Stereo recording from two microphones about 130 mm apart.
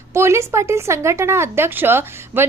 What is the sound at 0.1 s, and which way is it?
A woman's voice, 20° right (ahead or behind).